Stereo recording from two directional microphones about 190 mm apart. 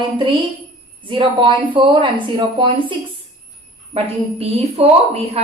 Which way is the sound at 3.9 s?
30° right (ahead or behind).